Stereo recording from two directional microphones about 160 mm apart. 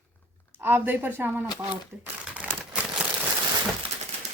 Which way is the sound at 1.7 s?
10° right (ahead or behind).